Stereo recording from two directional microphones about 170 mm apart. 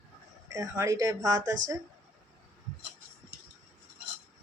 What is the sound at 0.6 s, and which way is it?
Speech, 15° right (ahead or behind).